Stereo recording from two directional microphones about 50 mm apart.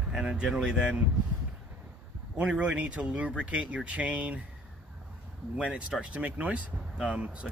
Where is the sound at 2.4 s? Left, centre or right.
Centre.